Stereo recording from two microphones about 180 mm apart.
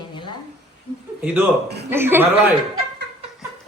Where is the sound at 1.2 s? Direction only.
10° right (ahead or behind).